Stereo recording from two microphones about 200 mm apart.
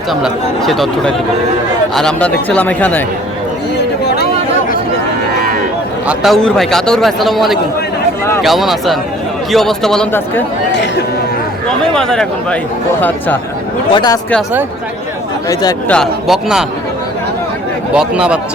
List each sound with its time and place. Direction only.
0.1 s a man's voice: centre (ahead or behind)
6.1 s a man's voice: centre (ahead or behind)
11.9 s a man's voice: 5° left (ahead or behind)
13.9 s speech: 20° left (ahead or behind)
15.9 s a man's voice: centre (ahead or behind)
17.9 s a man's voice: 5° right (ahead or behind)